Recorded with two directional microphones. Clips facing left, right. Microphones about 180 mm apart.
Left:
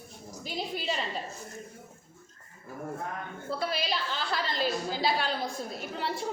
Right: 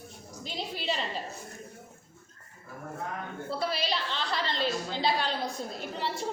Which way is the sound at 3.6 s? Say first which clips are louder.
Right 1 dB; centre (ahead or behind).